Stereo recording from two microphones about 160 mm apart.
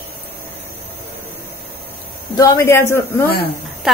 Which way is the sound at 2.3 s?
20° left (ahead or behind).